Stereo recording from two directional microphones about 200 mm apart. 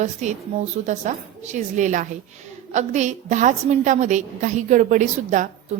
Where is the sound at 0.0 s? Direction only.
35° right (ahead or behind).